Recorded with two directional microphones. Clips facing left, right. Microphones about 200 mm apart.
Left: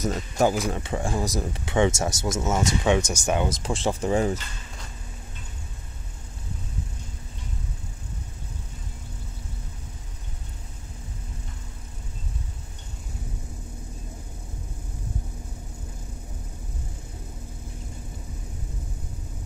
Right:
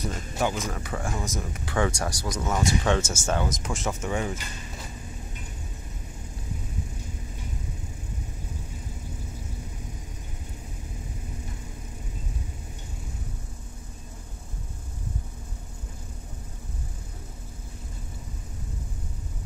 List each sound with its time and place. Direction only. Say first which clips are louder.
0.0 s speech: left 5 dB; 40° left (ahead or behind)
0.7 s speech: left 4 dB; 25° left (ahead or behind)
3.4 s speech: left 4 dB; 30° left (ahead or behind)